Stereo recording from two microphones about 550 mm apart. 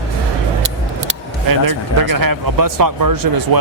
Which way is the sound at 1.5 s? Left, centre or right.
Right.